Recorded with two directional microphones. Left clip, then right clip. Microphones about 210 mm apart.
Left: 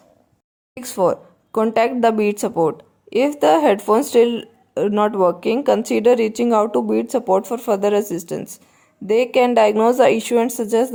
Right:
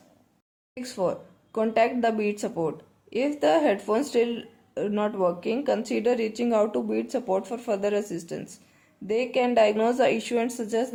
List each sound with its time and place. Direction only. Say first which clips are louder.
0.7 s speech: left 9 dB; 35° left (ahead or behind)